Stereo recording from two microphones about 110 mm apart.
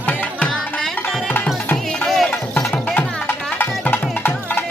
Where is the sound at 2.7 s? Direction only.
15° left (ahead or behind).